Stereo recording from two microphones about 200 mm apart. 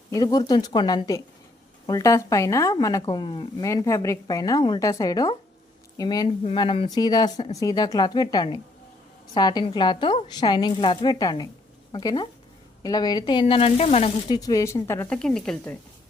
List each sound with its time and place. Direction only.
0.1 s a woman's voice: 20° left (ahead or behind)
7.3 s speech: 35° left (ahead or behind)
7.5 s a woman's voice: 20° left (ahead or behind)
14.3 s speech: 15° left (ahead or behind)